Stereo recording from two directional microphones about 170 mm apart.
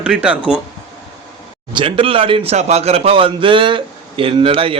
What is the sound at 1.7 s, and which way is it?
Speech, 30° right (ahead or behind).